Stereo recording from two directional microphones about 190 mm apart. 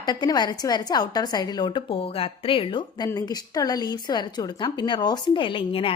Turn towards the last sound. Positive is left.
turn(degrees=30)  # may be behind; listen again after turning